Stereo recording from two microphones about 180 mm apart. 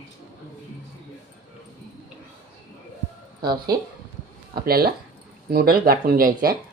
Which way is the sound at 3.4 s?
25° right (ahead or behind).